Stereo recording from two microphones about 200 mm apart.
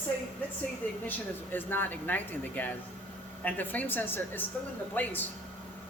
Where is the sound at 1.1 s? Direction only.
10° left (ahead or behind).